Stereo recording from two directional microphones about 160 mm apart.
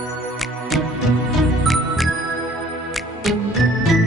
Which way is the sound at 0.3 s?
Centre (ahead or behind).